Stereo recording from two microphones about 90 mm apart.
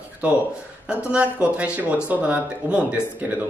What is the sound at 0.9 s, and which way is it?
Speech, 15° right (ahead or behind).